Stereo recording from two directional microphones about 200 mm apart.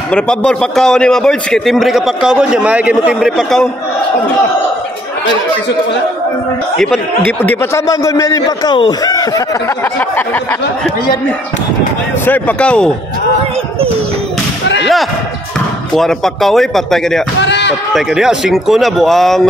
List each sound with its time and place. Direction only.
0.1 s a man's voice: 5° left (ahead or behind)
6.8 s a man's voice: 5° left (ahead or behind)
12.3 s a man's voice: 5° left (ahead or behind)
15.9 s a man's voice: centre (ahead or behind)
17.4 s speech: 60° left (ahead or behind)
17.9 s a man's voice: centre (ahead or behind)